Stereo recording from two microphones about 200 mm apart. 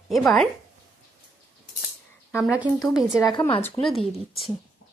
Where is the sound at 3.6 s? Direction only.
5° left (ahead or behind).